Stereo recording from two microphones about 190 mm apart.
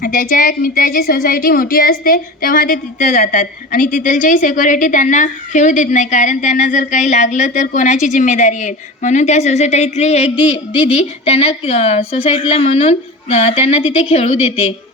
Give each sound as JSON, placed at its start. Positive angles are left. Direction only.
{"t": 0.0, "sound": "a woman's voice", "side_deg": 45}